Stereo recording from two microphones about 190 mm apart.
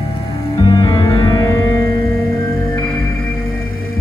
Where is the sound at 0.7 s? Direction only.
20° left (ahead or behind).